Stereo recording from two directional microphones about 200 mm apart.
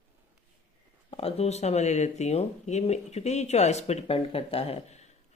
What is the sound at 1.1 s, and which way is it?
Speech, 30° left (ahead or behind).